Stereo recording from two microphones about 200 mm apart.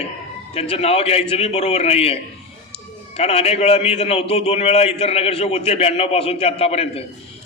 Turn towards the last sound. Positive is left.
turn(degrees=30)  # may be behind; listen again after turning